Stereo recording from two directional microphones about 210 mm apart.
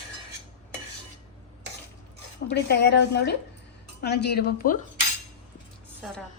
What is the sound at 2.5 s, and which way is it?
A woman's voice, 55° left (ahead or behind).